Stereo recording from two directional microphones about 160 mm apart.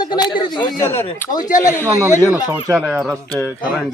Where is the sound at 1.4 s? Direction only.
55° left (ahead or behind).